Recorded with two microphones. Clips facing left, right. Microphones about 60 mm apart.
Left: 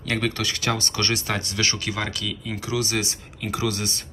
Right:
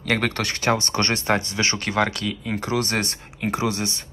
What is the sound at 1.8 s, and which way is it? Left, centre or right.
Speech, right.